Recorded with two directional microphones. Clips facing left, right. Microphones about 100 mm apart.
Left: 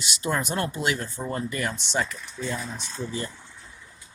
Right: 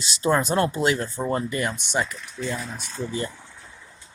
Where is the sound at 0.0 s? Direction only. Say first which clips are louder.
Right 6 dB; 30° right (ahead or behind); by 2.1 s 15° right (ahead or behind).